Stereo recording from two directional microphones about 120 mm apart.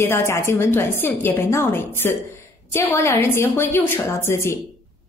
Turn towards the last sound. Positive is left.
turn(degrees=20)  # may be behind; listen again after turning